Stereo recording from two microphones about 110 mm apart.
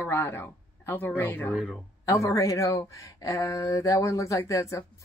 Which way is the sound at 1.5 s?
10° right (ahead or behind).